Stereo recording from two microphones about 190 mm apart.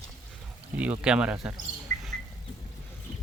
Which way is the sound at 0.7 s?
5° right (ahead or behind).